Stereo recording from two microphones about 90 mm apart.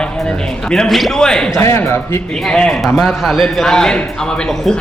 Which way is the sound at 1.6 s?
30° left (ahead or behind).